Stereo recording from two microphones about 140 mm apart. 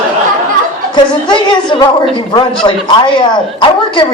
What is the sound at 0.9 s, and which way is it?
A man's voice, 30° left (ahead or behind).